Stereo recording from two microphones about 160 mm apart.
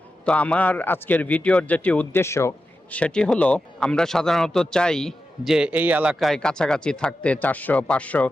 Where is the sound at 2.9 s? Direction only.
5° left (ahead or behind).